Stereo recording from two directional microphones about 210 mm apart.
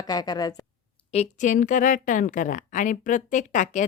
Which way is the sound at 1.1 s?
35° left (ahead or behind).